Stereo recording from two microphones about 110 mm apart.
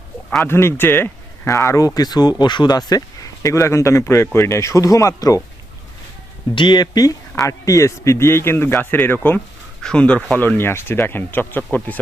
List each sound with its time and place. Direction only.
0.4 s speech: 20° left (ahead or behind)
1.5 s speech: 30° left (ahead or behind)
6.5 s speech: 45° left (ahead or behind); by 11.9 s 15° left (ahead or behind)